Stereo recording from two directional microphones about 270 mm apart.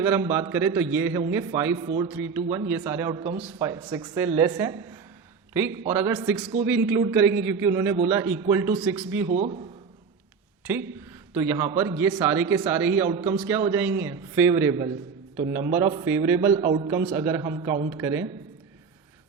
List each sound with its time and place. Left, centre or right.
0.0 s a man's voice: centre
9.3 s a man's voice: right
10.6 s a man's voice: centre